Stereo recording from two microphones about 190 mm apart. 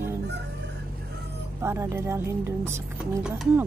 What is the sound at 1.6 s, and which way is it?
Speech, 15° right (ahead or behind).